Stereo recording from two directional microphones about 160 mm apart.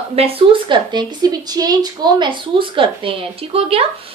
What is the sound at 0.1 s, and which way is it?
A woman's voice, 35° right (ahead or behind).